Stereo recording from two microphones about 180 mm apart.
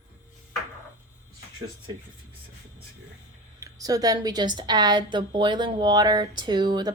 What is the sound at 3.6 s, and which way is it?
A woman's voice, 20° right (ahead or behind).